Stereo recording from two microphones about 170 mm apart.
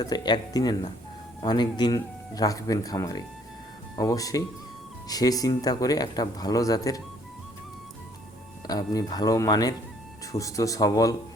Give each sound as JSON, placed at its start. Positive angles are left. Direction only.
{"t": 0.0, "sound": "speech", "side_deg": 25}
{"t": 8.6, "sound": "speech", "side_deg": 20}